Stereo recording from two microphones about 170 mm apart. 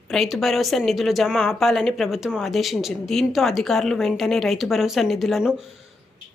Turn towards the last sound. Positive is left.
turn(degrees=-5)  # may be behind; listen again after turning